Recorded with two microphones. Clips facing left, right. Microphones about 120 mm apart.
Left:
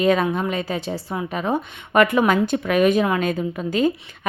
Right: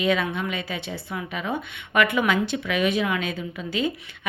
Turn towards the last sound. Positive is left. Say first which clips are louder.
# left 6 dB
turn(degrees=45)  # may be behind; listen again after turning